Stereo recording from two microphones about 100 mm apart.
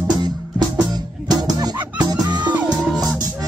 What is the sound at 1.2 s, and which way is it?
Music, 40° right (ahead or behind).